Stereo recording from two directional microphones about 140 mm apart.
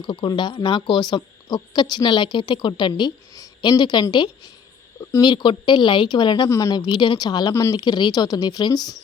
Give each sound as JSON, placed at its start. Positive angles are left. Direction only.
{"t": 0.0, "sound": "speech", "side_deg": 35}